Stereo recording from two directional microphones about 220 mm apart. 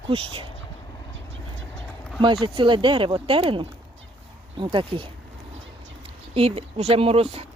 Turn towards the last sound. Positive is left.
turn(degrees=-25)  # may be behind; listen again after turning